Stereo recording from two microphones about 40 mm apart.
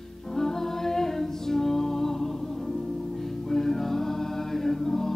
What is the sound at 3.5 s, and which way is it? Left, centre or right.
Music, centre.